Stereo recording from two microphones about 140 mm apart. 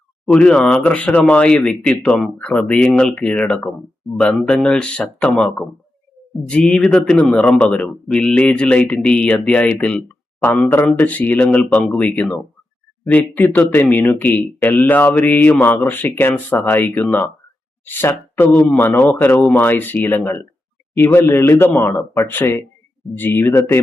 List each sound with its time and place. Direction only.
0.3 s speech: 5° left (ahead or behind)